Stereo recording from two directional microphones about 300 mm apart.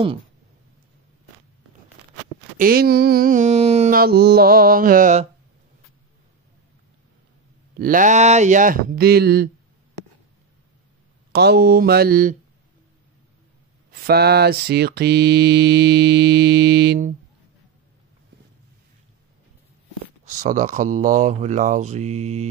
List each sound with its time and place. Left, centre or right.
2.5 s mantra: right
7.7 s mantra: right
11.3 s mantra: right
13.9 s mantra: right
20.2 s mantra: right